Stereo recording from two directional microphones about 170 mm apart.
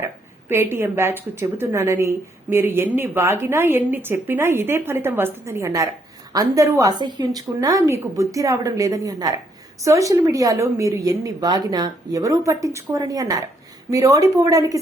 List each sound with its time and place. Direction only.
0.0 s a woman's voice: 15° right (ahead or behind)